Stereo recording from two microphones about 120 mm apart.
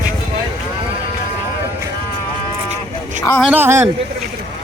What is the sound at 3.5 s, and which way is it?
Speech, 20° right (ahead or behind).